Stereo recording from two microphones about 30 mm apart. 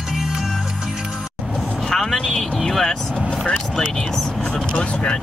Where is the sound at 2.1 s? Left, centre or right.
Centre.